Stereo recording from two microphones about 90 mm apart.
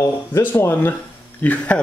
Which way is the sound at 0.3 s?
25° left (ahead or behind).